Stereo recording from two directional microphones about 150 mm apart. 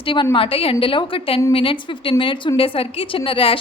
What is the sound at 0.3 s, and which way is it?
A woman's voice, 40° left (ahead or behind).